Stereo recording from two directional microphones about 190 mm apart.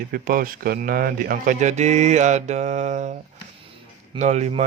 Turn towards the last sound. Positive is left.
turn(degrees=-35)  # may be behind; listen again after turning